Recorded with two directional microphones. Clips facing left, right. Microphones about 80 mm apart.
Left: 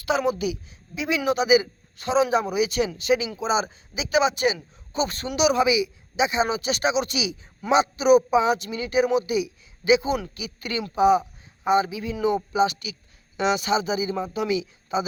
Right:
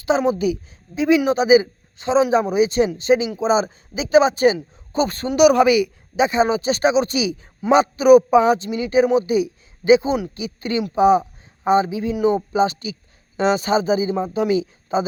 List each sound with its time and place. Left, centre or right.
0.0 s a woman's voice: right
5.5 s a woman's voice: right
8.5 s a woman's voice: right